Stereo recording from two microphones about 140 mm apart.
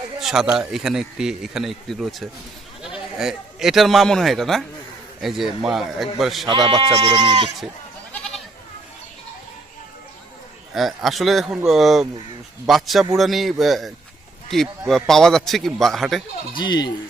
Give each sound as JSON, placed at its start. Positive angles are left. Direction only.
{"t": 0.2, "sound": "speech", "side_deg": -5}
{"t": 6.5, "sound": "speech", "side_deg": -35}
{"t": 8.1, "sound": "goat", "side_deg": 5}
{"t": 10.8, "sound": "speech", "side_deg": 0}
{"t": 16.6, "sound": "speech", "side_deg": 30}